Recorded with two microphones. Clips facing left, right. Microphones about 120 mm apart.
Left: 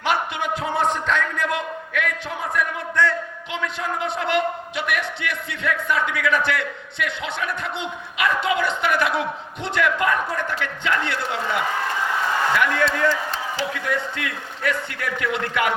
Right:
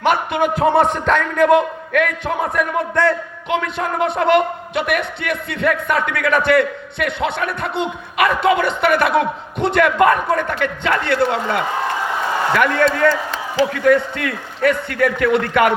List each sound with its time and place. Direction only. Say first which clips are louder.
0.0 s music: right 7 dB; 50° right (ahead or behind)
1.0 s a man's voice: right 9 dB; 55° right (ahead or behind)
12.5 s a man's voice: right 5 dB; 55° right (ahead or behind)